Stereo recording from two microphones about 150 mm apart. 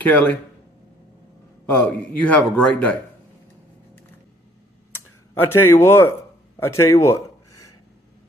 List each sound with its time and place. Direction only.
0.0 s a man's voice: 10° left (ahead or behind)
1.7 s a man's voice: 10° left (ahead or behind)
5.3 s a man's voice: 15° left (ahead or behind)